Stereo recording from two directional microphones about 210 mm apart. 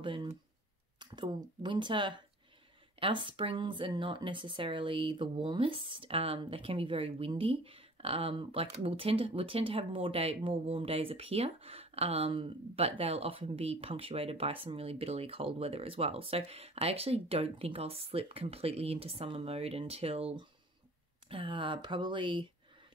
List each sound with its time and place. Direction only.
0.0 s speech: 25° right (ahead or behind)